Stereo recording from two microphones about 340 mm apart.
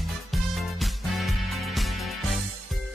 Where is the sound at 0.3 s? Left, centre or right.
Centre.